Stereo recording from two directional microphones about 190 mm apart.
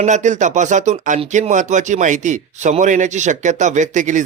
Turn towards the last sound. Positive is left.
turn(degrees=-40)  # may be behind; listen again after turning